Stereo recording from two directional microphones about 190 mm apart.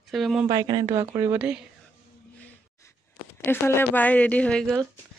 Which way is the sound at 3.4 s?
10° left (ahead or behind).